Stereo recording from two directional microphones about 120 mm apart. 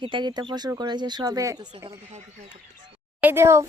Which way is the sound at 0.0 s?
40° right (ahead or behind).